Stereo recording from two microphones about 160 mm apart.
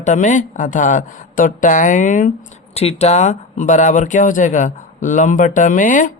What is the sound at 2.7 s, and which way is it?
Speech, 40° left (ahead or behind).